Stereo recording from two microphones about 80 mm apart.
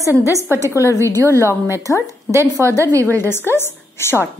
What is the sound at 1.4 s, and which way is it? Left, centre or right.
Speech, left.